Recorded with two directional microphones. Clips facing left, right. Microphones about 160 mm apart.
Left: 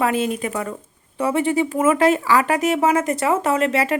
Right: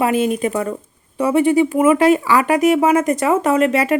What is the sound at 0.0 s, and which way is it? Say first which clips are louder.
Speech: right 4 dB; 15° right (ahead or behind).